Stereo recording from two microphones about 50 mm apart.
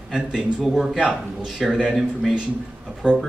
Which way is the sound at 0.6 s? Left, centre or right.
Centre.